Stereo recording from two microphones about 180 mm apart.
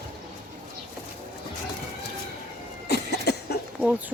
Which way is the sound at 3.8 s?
5° right (ahead or behind).